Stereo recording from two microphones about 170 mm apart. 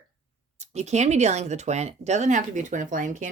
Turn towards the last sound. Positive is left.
turn(degrees=-50)  # may be behind; listen again after turning